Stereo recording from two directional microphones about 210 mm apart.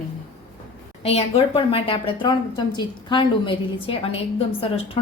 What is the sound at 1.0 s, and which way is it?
A woman's voice, 30° left (ahead or behind).